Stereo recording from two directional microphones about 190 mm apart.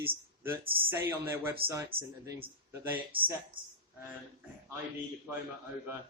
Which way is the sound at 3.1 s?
25° right (ahead or behind).